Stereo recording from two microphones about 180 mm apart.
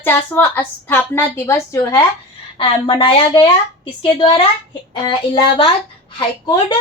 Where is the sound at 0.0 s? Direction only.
10° left (ahead or behind).